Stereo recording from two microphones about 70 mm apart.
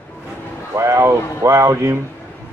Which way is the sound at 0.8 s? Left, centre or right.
Right.